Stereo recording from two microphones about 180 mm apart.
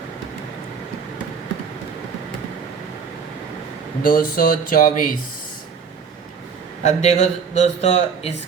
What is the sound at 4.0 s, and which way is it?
Speech, 50° left (ahead or behind).